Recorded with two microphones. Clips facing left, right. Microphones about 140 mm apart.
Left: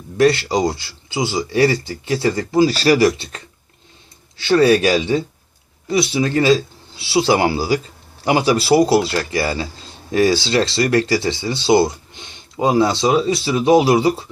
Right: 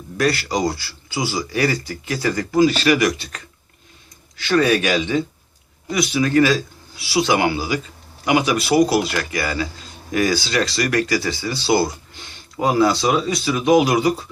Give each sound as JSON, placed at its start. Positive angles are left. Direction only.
{"t": 0.2, "sound": "speech", "side_deg": 25}